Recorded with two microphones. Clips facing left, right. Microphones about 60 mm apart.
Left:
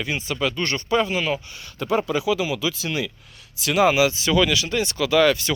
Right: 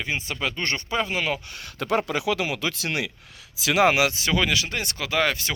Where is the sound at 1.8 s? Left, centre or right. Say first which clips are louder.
Left 2 dB; right.